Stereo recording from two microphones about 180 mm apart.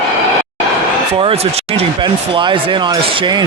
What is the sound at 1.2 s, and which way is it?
Speech, 35° right (ahead or behind).